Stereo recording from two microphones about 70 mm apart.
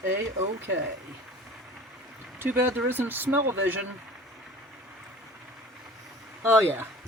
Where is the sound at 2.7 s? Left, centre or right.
Right.